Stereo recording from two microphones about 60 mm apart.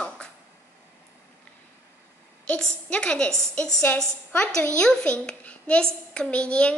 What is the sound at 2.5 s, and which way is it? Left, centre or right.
A woman's voice, centre.